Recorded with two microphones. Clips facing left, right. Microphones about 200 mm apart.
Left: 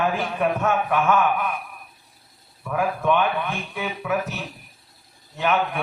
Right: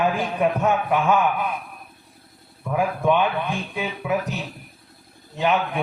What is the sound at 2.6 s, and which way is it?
A man's voice, 20° right (ahead or behind).